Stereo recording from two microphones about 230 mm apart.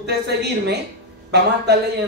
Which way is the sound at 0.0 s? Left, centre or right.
Right.